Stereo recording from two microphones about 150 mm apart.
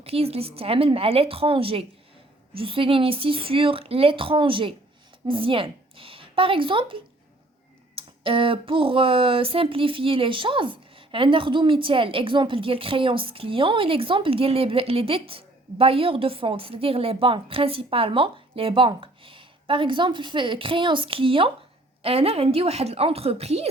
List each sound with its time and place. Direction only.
0.0 s speech: 40° right (ahead or behind)